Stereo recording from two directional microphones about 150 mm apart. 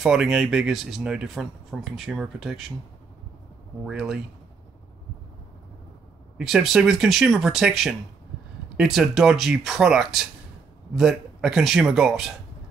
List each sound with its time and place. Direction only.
0.0 s speech: 5° right (ahead or behind)
3.8 s speech: 5° right (ahead or behind)
6.3 s speech: centre (ahead or behind)